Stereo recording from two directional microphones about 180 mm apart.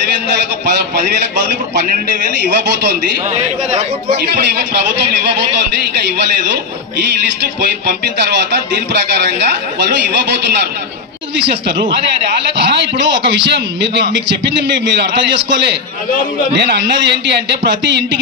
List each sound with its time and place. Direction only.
9.4 s speech: 70° right (ahead or behind)
11.4 s speech: 30° right (ahead or behind)
12.5 s speech: 75° right (ahead or behind)
16.5 s speech: 70° right (ahead or behind)